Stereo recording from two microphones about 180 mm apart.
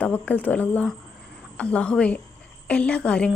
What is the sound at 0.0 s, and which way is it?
A woman's voice, 10° left (ahead or behind).